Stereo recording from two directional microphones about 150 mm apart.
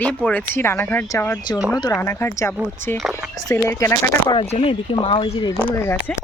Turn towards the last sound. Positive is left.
turn(degrees=15)  # may be behind; listen again after turning